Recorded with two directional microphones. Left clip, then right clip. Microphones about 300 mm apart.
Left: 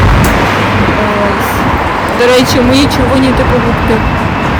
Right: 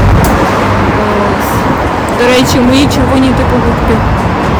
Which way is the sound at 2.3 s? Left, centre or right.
Centre.